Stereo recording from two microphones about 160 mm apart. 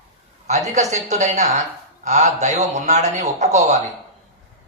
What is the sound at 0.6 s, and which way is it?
Speech, 45° right (ahead or behind).